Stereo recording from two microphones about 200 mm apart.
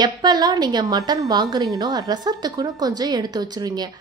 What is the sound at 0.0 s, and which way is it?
A woman's voice, 20° right (ahead or behind).